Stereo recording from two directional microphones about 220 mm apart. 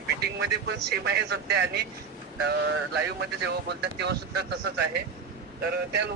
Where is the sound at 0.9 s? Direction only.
50° right (ahead or behind).